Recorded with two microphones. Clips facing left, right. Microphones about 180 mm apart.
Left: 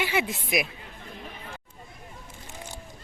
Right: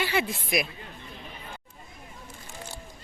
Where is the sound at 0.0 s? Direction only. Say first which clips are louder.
Even; 15° left (ahead or behind).